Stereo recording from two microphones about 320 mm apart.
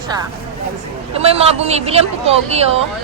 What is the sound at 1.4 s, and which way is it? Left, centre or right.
Speech, centre.